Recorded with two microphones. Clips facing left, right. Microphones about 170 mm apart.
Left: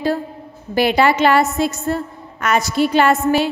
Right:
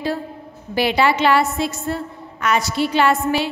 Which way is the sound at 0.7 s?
50° left (ahead or behind).